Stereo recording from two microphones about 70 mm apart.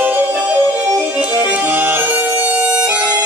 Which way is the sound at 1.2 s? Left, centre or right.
Right.